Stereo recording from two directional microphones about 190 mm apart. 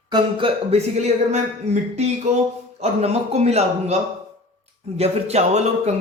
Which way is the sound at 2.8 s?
35° right (ahead or behind).